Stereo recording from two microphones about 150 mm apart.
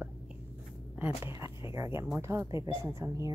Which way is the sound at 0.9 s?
15° right (ahead or behind).